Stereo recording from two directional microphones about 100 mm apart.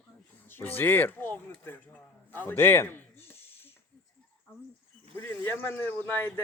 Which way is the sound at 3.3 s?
20° left (ahead or behind).